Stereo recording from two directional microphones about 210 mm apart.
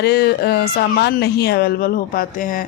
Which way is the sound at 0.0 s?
50° left (ahead or behind).